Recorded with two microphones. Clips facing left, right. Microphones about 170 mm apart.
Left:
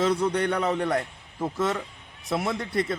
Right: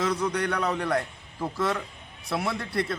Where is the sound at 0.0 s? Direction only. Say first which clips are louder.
Left 3 dB; 30° left (ahead or behind).